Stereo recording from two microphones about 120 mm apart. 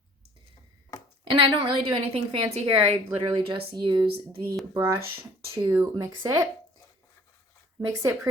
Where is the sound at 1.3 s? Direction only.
45° right (ahead or behind).